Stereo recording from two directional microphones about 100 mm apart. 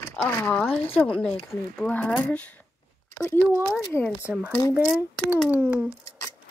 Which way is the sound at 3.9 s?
25° left (ahead or behind).